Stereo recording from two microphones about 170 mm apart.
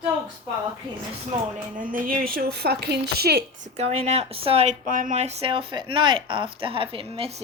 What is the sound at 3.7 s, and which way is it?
Speech, 40° right (ahead or behind).